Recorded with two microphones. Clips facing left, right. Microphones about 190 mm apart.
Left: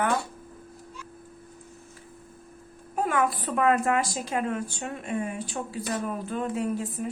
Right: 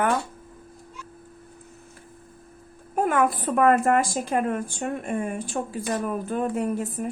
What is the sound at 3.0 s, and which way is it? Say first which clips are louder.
A woman's voice: right 4 dB; 50° right (ahead or behind).